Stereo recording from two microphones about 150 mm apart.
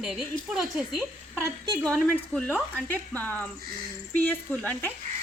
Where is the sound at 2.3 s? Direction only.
10° left (ahead or behind).